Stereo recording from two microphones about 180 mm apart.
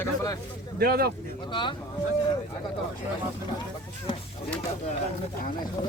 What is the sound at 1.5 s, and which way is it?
Speech, 25° left (ahead or behind).